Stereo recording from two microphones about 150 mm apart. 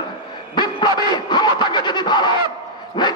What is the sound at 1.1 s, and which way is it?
A man's voice, 30° left (ahead or behind).